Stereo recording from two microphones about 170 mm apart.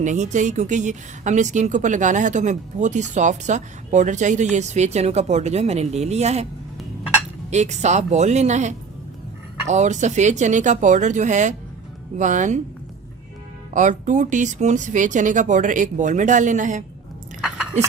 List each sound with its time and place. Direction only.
0.0 s a woman's voice: 45° right (ahead or behind)
7.5 s a woman's voice: 45° right (ahead or behind)
13.7 s a woman's voice: 45° right (ahead or behind)